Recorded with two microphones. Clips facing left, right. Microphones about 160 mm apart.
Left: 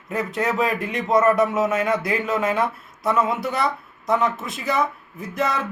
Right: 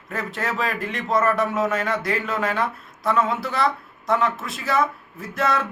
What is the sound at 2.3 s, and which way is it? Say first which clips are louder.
Speech: left 5 dB; 20° left (ahead or behind).